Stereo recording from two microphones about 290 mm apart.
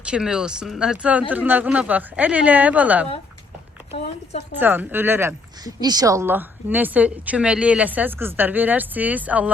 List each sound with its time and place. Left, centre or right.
0.0 s speech: centre
3.9 s speech: left
4.6 s speech: centre